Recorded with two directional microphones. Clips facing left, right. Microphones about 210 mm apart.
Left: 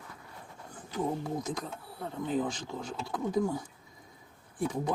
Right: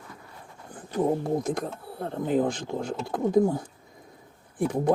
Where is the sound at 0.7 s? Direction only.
55° right (ahead or behind).